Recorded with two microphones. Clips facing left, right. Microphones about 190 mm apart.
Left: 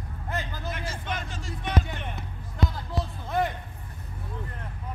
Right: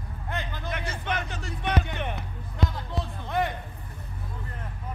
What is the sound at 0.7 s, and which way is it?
Speech, 65° right (ahead or behind).